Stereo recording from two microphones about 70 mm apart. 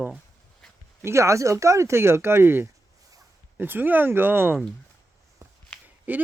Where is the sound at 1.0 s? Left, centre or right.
Right.